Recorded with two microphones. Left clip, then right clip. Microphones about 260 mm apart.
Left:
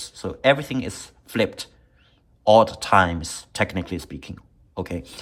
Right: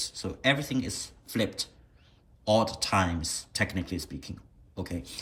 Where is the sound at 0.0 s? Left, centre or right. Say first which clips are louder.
Left 8 dB; centre.